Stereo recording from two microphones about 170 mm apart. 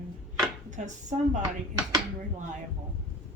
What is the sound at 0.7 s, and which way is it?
Speech, 45° right (ahead or behind).